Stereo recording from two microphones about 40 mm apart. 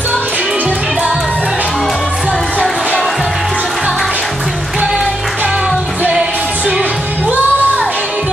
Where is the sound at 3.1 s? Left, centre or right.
Centre.